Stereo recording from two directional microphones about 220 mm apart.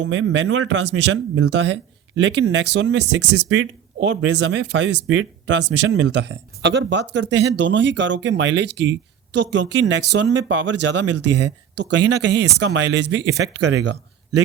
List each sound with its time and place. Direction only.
0.0 s speech: 55° right (ahead or behind)